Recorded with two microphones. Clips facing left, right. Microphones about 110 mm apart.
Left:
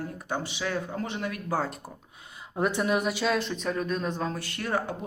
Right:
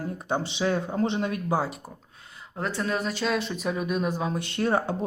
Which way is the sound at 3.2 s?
Centre (ahead or behind).